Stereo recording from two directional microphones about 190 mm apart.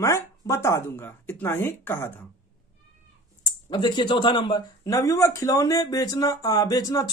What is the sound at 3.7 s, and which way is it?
A man's voice, 25° left (ahead or behind).